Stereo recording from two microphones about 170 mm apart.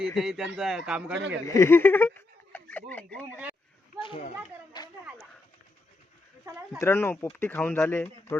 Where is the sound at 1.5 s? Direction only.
15° left (ahead or behind).